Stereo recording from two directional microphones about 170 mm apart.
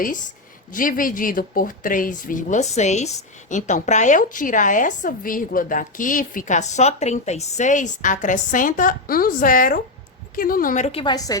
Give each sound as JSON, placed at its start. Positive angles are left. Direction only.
{"t": 0.7, "sound": "speech", "side_deg": 55}
{"t": 11.0, "sound": "a woman's voice", "side_deg": 20}